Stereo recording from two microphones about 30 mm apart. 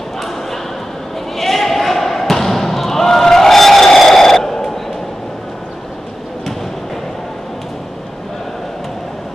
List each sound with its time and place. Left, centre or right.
1.3 s basketball bounce: centre